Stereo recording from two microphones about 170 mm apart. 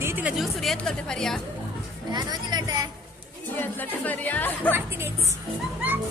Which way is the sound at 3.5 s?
10° left (ahead or behind).